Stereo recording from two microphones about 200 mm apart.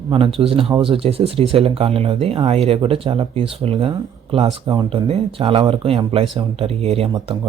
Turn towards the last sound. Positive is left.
turn(degrees=-30)  # may be behind; listen again after turning